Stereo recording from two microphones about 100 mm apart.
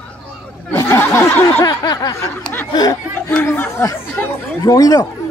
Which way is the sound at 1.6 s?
40° left (ahead or behind).